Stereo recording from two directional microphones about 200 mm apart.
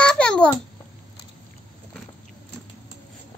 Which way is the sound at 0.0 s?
5° left (ahead or behind).